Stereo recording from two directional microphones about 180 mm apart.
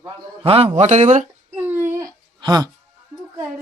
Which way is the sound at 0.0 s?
30° right (ahead or behind).